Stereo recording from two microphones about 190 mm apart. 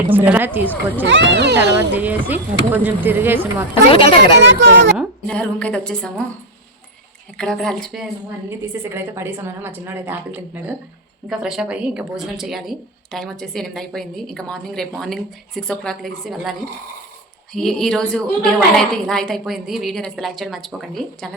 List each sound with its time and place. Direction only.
0.1 s a woman's voice: 10° right (ahead or behind)
1.0 s speech: 70° right (ahead or behind)
1.9 s a woman's voice: 10° right (ahead or behind)
3.9 s speech: 30° left (ahead or behind)
4.4 s speech: 70° right (ahead or behind)
4.9 s speech: 5° left (ahead or behind)
7.3 s speech: 5° left (ahead or behind)
8.4 s a woman's voice: 15° right (ahead or behind)